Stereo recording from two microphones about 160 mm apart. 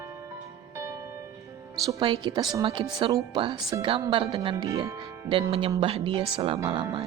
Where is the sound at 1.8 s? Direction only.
30° right (ahead or behind).